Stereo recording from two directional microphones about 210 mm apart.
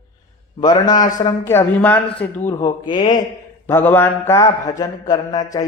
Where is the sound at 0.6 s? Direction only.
20° left (ahead or behind).